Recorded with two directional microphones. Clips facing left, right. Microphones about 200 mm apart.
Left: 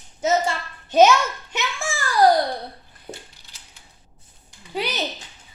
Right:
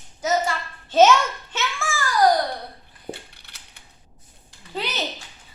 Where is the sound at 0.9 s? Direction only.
15° left (ahead or behind).